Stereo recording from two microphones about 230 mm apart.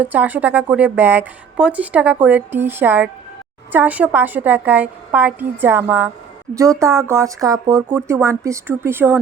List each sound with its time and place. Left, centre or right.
0.0 s a woman's voice: centre